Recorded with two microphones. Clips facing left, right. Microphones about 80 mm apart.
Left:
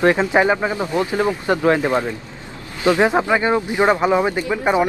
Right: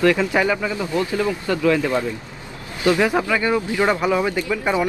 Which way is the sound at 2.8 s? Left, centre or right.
Left.